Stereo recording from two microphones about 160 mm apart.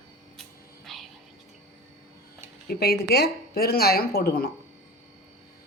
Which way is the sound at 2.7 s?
85° left.